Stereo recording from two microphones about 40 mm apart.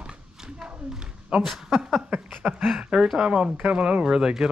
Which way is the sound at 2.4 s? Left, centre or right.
Right.